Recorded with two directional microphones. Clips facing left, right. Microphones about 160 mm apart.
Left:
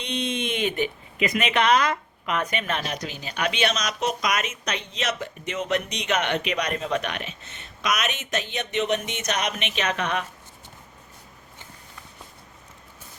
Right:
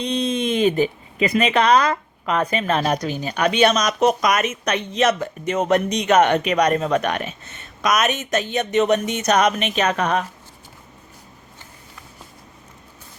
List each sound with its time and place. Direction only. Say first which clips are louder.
0.0 s speech: right 6 dB; 35° right (ahead or behind)